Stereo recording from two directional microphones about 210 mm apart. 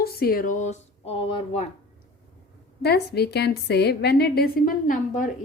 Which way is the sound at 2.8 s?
50° left (ahead or behind).